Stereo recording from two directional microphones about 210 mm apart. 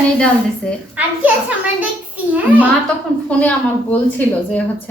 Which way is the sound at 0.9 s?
5° right (ahead or behind).